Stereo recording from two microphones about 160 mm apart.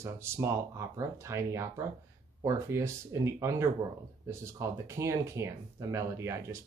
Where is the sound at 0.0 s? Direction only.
15° right (ahead or behind).